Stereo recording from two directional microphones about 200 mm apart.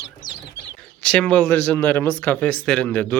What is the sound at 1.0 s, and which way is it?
Speech, 5° left (ahead or behind).